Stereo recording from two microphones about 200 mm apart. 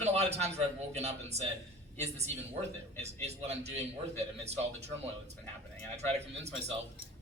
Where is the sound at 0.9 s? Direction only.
35° right (ahead or behind).